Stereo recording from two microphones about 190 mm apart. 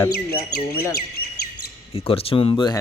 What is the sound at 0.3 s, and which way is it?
Speech, 15° left (ahead or behind).